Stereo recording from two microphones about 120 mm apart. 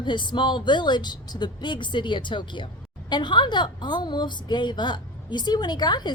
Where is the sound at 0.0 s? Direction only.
40° left (ahead or behind).